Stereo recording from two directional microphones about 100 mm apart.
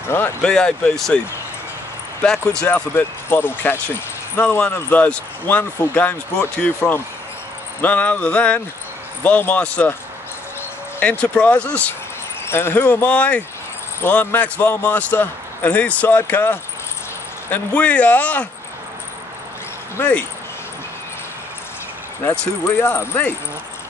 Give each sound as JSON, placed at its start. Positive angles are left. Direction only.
{"t": 0.1, "sound": "speech", "side_deg": 25}
{"t": 0.4, "sound": "a man's voice", "side_deg": 5}
{"t": 2.7, "sound": "a man's voice", "side_deg": 25}
{"t": 11.0, "sound": "a man's voice", "side_deg": 15}
{"t": 12.4, "sound": "a man's voice", "side_deg": 25}
{"t": 20.0, "sound": "a man's voice", "side_deg": 15}
{"t": 22.8, "sound": "speech", "side_deg": 25}